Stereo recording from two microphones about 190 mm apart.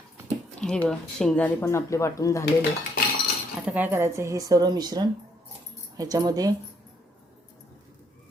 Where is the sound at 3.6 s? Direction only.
10° right (ahead or behind).